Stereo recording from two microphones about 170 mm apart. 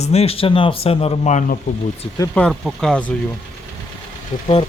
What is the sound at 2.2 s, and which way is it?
Speech, 10° left (ahead or behind).